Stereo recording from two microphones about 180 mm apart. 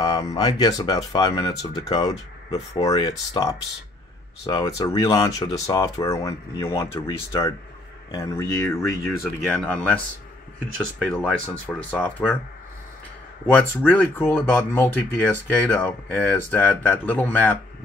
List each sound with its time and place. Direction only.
0.0 s a sound: 20° left (ahead or behind)
0.4 s speech: 20° left (ahead or behind)
9.4 s speech: 5° left (ahead or behind)
11.0 s speech: 5° left (ahead or behind)
13.5 s speech: 10° left (ahead or behind)